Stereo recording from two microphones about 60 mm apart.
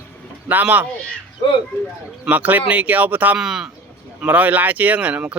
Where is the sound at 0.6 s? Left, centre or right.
Right.